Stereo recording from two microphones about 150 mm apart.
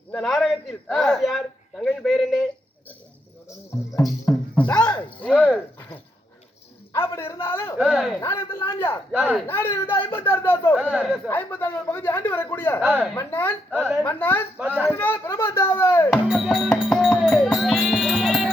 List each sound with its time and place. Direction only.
0.1 s a man's voice: 5° left (ahead or behind)
3.9 s speech: 25° left (ahead or behind)
4.5 s a sound: 10° left (ahead or behind)
6.9 s a sound: 15° left (ahead or behind)
7.4 s speech: 15° left (ahead or behind)
7.8 s a man's voice: 5° right (ahead or behind)
8.1 s speech: 15° left (ahead or behind)
9.1 s a man's voice: 10° right (ahead or behind)
9.5 s speech: 15° left (ahead or behind)
10.8 s a man's voice: 10° right (ahead or behind)
11.3 s speech: 15° left (ahead or behind)
12.8 s a man's voice: 10° right (ahead or behind)
13.1 s speech: 15° left (ahead or behind)
16.2 s music: centre (ahead or behind)